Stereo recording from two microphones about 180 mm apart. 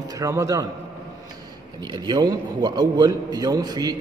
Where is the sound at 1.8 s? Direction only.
25° right (ahead or behind).